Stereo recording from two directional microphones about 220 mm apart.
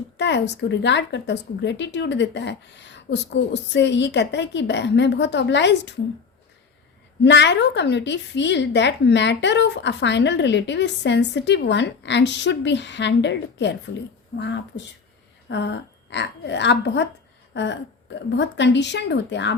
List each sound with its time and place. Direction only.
0.2 s a woman's voice: 50° left (ahead or behind)
7.2 s a woman's voice: 55° left (ahead or behind)
17.5 s a sound: 55° left (ahead or behind)
18.3 s a woman's voice: 50° left (ahead or behind)